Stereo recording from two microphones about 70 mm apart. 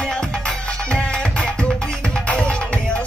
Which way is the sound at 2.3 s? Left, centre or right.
Centre.